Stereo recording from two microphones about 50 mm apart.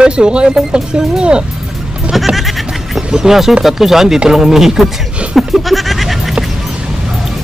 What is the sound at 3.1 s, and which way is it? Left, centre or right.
Speech, centre.